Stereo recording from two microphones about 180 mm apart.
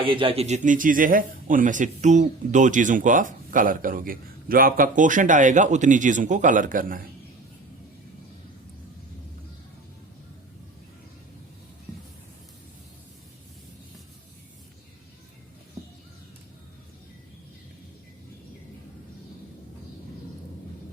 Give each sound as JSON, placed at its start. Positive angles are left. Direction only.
{"t": 0.0, "sound": "a man's voice", "side_deg": -30}